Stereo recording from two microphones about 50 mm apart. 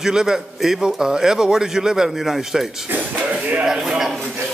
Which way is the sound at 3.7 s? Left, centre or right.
Centre.